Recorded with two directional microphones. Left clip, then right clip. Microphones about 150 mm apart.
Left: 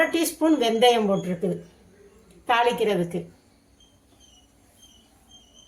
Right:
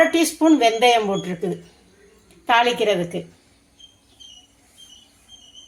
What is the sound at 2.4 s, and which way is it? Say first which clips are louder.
Speech: right 4 dB; 30° right (ahead or behind).